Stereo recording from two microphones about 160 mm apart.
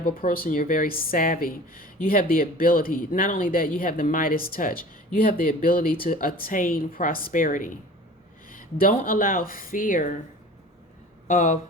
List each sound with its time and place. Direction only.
0.0 s a woman's voice: 65° left (ahead or behind)
11.3 s speech: 50° left (ahead or behind)